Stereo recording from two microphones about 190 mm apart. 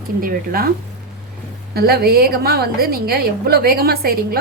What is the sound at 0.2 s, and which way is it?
Speech, 50° right (ahead or behind).